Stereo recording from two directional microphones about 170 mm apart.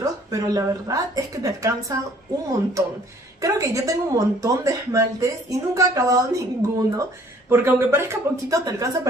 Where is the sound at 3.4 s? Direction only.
20° right (ahead or behind).